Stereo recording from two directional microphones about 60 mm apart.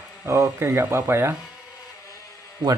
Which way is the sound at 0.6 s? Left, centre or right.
Right.